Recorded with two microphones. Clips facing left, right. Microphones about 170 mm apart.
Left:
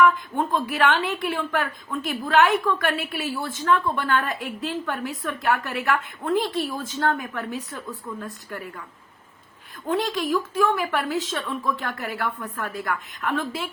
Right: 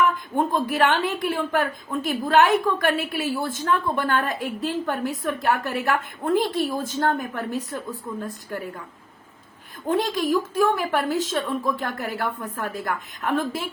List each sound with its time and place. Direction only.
0.7 s a woman's voice: 45° right (ahead or behind)
9.9 s a woman's voice: 45° right (ahead or behind)